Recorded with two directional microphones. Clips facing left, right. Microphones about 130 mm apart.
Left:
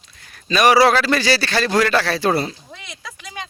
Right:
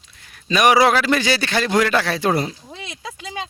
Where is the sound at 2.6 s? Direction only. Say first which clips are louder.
Right 4 dB; 25° right (ahead or behind).